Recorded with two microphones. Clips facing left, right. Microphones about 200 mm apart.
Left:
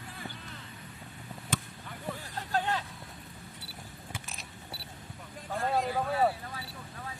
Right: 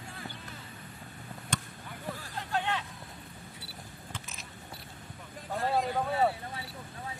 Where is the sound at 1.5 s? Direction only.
5° left (ahead or behind).